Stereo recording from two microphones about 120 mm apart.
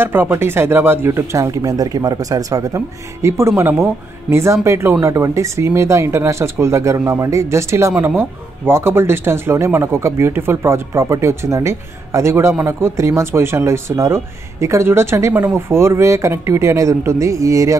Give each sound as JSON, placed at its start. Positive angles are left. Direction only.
{"t": 0.0, "sound": "speech", "side_deg": -20}